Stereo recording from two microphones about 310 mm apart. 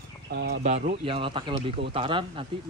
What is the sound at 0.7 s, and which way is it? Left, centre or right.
Speech, centre.